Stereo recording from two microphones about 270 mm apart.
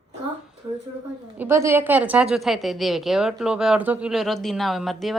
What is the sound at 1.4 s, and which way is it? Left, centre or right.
A woman's voice, centre.